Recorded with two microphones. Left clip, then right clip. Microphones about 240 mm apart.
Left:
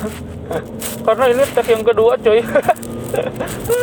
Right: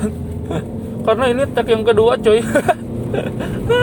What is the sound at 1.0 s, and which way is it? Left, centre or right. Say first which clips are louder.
Speech: left 2 dB; right.